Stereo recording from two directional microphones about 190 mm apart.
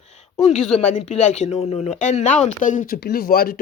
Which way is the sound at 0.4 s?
35° left (ahead or behind).